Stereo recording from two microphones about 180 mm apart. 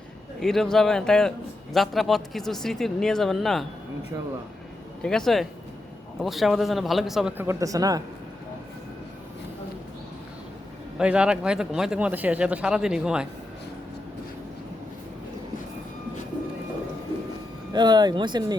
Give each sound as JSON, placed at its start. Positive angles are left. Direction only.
{"t": 0.3, "sound": "speech", "side_deg": 0}
{"t": 5.0, "sound": "speech", "side_deg": 5}
{"t": 7.3, "sound": "speech", "side_deg": -15}
{"t": 10.9, "sound": "speech", "side_deg": -5}
{"t": 17.7, "sound": "speech", "side_deg": -25}